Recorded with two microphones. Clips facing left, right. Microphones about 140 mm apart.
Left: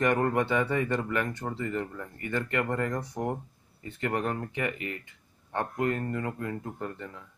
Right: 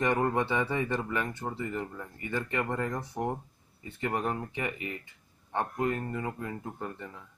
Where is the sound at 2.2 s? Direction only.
20° right (ahead or behind).